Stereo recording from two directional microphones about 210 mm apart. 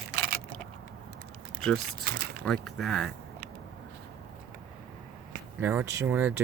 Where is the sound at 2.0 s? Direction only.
50° right (ahead or behind).